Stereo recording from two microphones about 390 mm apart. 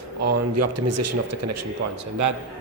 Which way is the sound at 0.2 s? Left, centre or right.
Right.